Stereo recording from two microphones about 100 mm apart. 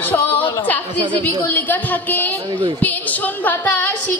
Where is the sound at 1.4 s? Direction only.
15° left (ahead or behind).